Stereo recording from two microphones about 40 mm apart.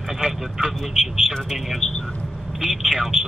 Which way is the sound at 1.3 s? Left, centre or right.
Centre.